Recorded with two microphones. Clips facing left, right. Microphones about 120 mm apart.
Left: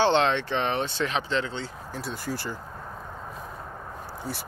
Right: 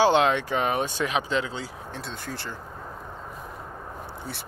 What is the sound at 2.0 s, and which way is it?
Speech, 5° left (ahead or behind).